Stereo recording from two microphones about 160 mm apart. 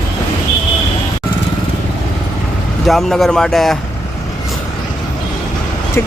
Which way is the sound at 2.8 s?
Centre (ahead or behind).